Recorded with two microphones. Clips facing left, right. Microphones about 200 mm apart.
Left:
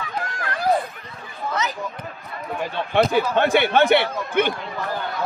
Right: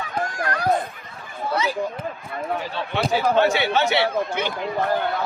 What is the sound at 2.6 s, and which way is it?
Speech, 55° left (ahead or behind).